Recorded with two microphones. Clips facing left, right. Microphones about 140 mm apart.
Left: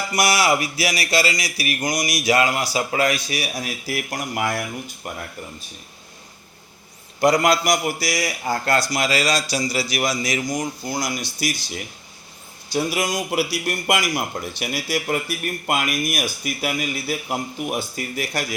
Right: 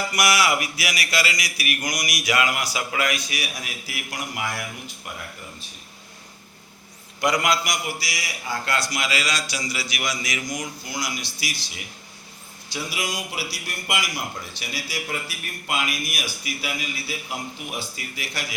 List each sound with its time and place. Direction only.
0.1 s a man's voice: 30° left (ahead or behind)
7.2 s a man's voice: 35° left (ahead or behind)
14.1 s speech: 55° left (ahead or behind)